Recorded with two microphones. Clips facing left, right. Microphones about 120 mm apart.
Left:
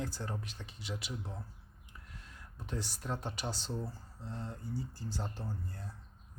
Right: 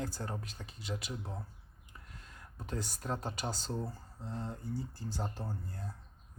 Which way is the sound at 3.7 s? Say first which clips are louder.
Right 2 dB; 15° right (ahead or behind).